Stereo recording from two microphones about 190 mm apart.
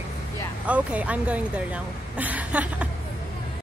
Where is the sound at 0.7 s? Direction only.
5° right (ahead or behind).